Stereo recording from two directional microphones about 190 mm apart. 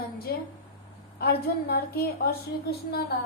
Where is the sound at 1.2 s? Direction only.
55° left (ahead or behind).